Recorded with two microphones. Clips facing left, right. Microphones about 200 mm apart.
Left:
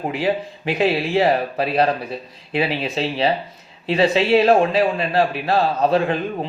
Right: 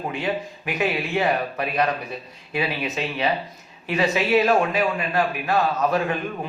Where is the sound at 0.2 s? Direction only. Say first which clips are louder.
Left 5 dB; 30° left (ahead or behind).